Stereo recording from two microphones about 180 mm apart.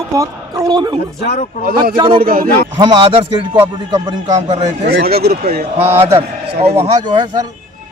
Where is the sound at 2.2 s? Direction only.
55° right (ahead or behind).